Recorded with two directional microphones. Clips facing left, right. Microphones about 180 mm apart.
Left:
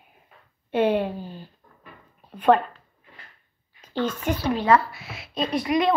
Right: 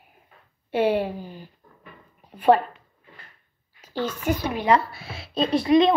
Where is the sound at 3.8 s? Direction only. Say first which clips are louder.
Left 1 dB; 10° right (ahead or behind).